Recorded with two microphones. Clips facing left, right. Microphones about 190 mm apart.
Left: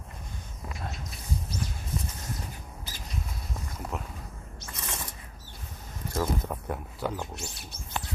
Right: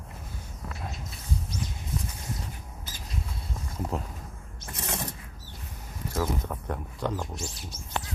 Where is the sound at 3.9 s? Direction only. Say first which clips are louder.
Right 3 dB; 35° right (ahead or behind).